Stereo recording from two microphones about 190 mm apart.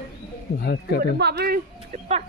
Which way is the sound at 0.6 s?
55° left (ahead or behind).